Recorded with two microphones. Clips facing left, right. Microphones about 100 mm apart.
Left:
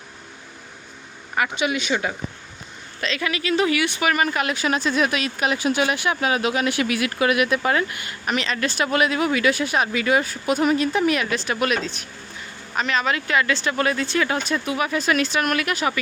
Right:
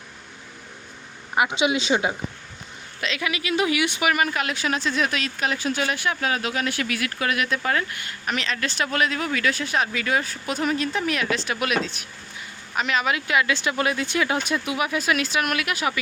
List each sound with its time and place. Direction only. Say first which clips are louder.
1.4 s speech: right 1 dB; 20° right (ahead or behind)
4.1 s speech: left 2 dB; centre (ahead or behind)